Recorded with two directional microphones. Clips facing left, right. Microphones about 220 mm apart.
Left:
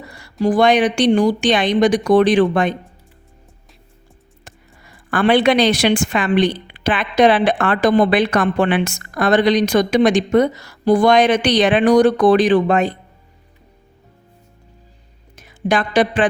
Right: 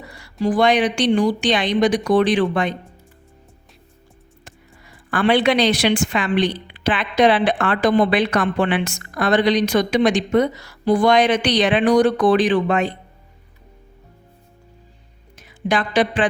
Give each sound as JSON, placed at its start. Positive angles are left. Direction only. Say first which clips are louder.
{"t": 0.4, "sound": "a woman's voice", "louder": "left 3 dB", "side_deg": 45}
{"t": 5.1, "sound": "a woman's voice", "louder": "left 3 dB", "side_deg": 50}
{"t": 15.4, "sound": "a sound", "louder": "left 3 dB", "side_deg": 45}